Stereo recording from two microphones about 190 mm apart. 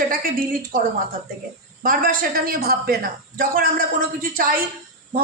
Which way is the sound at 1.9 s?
50° right (ahead or behind).